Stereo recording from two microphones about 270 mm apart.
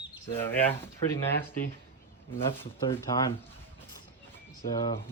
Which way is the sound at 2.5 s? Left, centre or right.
Centre.